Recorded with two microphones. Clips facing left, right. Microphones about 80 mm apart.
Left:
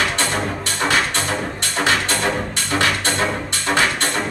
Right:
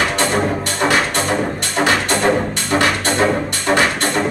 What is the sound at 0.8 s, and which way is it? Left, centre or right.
Music, right.